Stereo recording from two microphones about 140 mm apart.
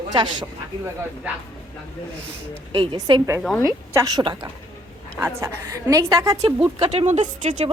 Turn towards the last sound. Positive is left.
turn(degrees=-60)  # may be behind; listen again after turning